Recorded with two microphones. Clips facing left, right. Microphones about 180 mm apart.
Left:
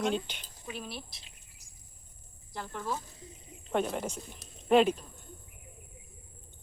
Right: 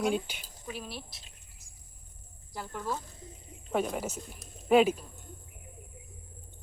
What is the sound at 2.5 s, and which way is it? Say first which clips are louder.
Speech: right 1 dB; 5° right (ahead or behind).